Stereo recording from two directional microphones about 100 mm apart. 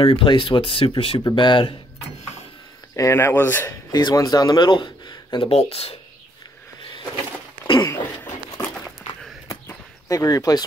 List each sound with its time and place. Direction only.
0.0 s speech: 60° left (ahead or behind)
1.3 s speech: 55° left (ahead or behind)
3.0 s speech: 30° left (ahead or behind)
3.9 s speech: 40° left (ahead or behind); by 5.9 s 85° left
7.6 s a sound: 50° left (ahead or behind)
8.2 s a sound: 20° left (ahead or behind)
10.0 s speech: 35° left (ahead or behind)